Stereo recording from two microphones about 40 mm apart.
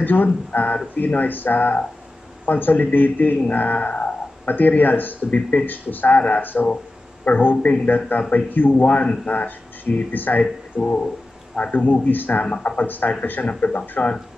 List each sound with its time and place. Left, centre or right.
0.0 s speech: left
4.5 s speech: left
5.7 s speech: left
8.5 s speech: left
10.4 s speech: left
11.7 s speech: left